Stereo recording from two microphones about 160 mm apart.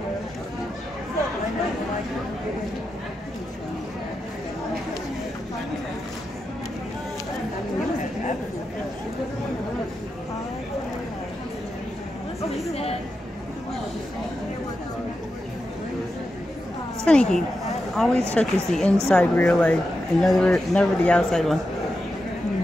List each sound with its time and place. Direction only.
12.4 s chatter: 40° left (ahead or behind)
17.0 s speech: 5° left (ahead or behind)